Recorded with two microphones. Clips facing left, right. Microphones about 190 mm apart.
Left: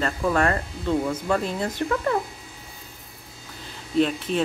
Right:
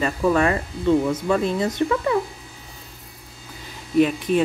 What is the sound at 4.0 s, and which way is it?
Speech, 10° right (ahead or behind).